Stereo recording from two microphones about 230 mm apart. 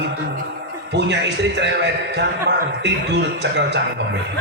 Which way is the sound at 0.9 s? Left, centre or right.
Right.